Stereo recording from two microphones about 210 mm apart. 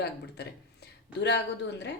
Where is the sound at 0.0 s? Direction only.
50° left (ahead or behind).